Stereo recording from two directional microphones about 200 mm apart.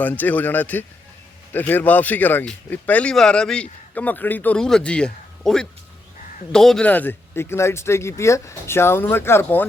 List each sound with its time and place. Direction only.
0.0 s speech: 10° left (ahead or behind)